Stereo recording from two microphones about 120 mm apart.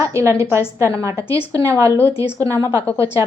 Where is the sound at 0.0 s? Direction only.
25° right (ahead or behind).